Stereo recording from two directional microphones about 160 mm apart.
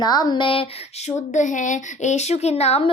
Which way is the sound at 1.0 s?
50° left (ahead or behind).